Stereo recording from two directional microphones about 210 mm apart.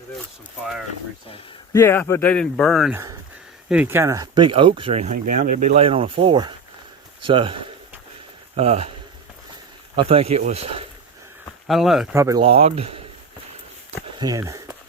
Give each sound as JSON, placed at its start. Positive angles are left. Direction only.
{"t": 1.7, "sound": "speech", "side_deg": 10}
{"t": 2.9, "sound": "speech", "side_deg": -15}
{"t": 9.9, "sound": "speech", "side_deg": -25}
{"t": 11.7, "sound": "speech", "side_deg": 0}
{"t": 12.1, "sound": "speech", "side_deg": -15}
{"t": 14.2, "sound": "a sound", "side_deg": -15}